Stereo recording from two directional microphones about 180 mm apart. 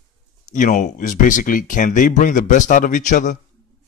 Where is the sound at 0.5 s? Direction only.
45° left (ahead or behind).